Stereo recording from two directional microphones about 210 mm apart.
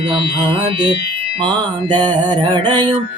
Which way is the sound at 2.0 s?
25° right (ahead or behind).